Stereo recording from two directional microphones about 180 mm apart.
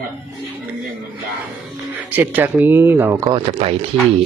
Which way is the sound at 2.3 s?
10° right (ahead or behind).